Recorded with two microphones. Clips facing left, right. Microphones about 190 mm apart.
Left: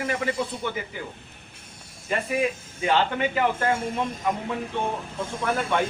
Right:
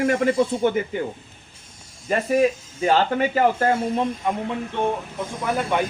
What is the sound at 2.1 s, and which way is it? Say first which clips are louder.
Speech: right 6 dB; 40° right (ahead or behind).